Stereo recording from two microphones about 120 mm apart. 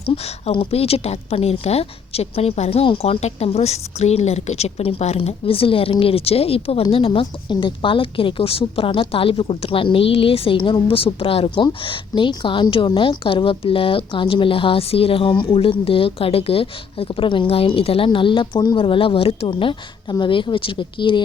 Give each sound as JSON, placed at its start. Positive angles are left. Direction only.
{"t": 0.5, "sound": "a woman's voice", "side_deg": 55}
{"t": 3.0, "sound": "a woman's voice", "side_deg": 60}
{"t": 11.6, "sound": "a woman's voice", "side_deg": 45}